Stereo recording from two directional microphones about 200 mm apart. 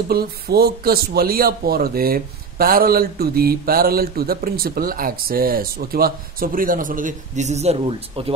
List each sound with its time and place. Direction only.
0.1 s speech: 50° right (ahead or behind); by 8.3 s 30° right (ahead or behind)